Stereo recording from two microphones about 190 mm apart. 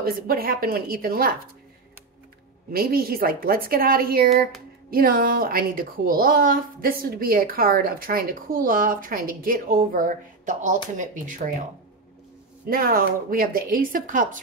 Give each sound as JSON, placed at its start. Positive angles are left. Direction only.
{"t": 0.0, "sound": "a woman's voice", "side_deg": -50}
{"t": 2.7, "sound": "a woman's voice", "side_deg": -50}
{"t": 12.6, "sound": "a woman's voice", "side_deg": -50}